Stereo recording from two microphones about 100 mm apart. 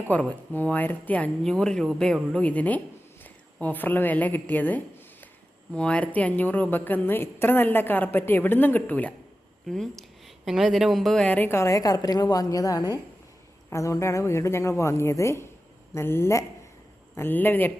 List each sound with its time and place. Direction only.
0.1 s a woman's voice: 15° left (ahead or behind)
1.5 s a woman's voice: 5° left (ahead or behind)
9.6 s a woman's voice: 5° left (ahead or behind); by 17.7 s 20° left (ahead or behind)